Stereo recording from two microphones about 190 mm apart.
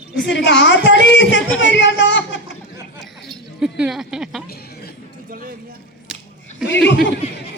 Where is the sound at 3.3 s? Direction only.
5° right (ahead or behind).